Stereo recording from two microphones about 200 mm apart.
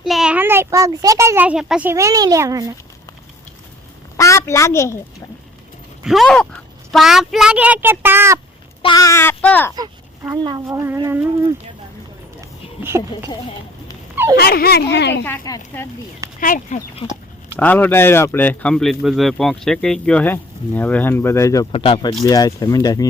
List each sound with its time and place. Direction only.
0.0 s a child's voice: centre (ahead or behind)
4.2 s a woman's voice: 15° left (ahead or behind)
6.1 s a child's voice: centre (ahead or behind)
8.8 s speech: 20° left (ahead or behind)
9.7 s a child's voice: 20° right (ahead or behind)
12.4 s a sound: 15° right (ahead or behind)
14.3 s speech: 50° left (ahead or behind)
15.2 s a man's voice: 15° left (ahead or behind)
16.4 s speech: 40° left (ahead or behind)
17.6 s a man's voice: 10° left (ahead or behind)
21.7 s speech: 25° left (ahead or behind)